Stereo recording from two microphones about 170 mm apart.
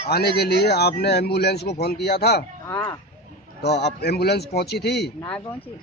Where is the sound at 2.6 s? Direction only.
15° left (ahead or behind).